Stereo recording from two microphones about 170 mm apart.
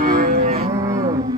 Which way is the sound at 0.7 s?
20° right (ahead or behind).